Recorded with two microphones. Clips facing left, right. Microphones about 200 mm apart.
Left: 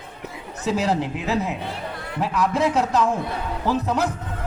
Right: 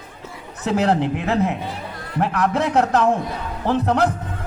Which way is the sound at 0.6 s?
60° right (ahead or behind).